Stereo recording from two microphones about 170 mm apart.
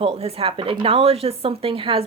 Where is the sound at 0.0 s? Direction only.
35° right (ahead or behind).